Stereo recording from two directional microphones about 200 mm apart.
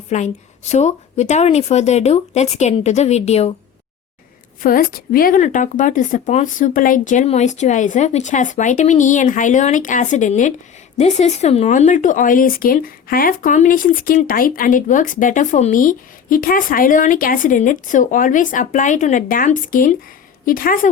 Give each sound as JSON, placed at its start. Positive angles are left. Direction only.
{"t": 0.1, "sound": "speech", "side_deg": 35}
{"t": 4.6, "sound": "a woman's voice", "side_deg": 45}